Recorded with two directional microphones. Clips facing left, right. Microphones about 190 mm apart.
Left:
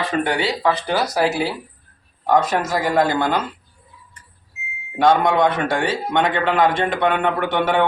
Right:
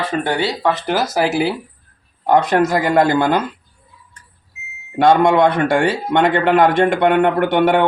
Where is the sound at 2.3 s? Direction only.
60° right (ahead or behind).